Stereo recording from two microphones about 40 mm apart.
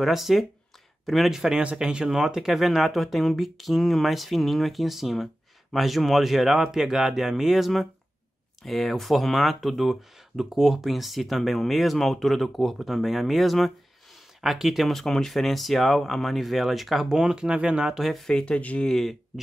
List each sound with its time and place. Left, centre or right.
0.0 s speech: centre
1.5 s speech: right
2.0 s speech: centre
10.4 s speech: centre
14.9 s speech: centre; by 17.9 s right
17.9 s speech: centre
18.4 s speech: left
18.9 s speech: centre